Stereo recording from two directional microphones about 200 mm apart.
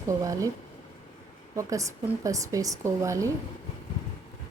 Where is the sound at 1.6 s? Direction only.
15° right (ahead or behind).